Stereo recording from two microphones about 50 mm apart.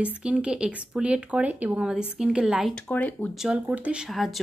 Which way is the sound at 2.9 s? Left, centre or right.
Left.